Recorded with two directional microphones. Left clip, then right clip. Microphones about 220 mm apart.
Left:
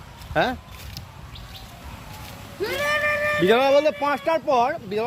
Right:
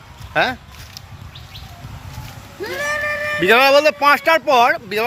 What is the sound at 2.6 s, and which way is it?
Cat, 30° right (ahead or behind).